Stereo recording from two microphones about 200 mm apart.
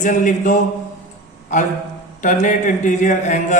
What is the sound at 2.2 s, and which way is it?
Speech, 40° left (ahead or behind).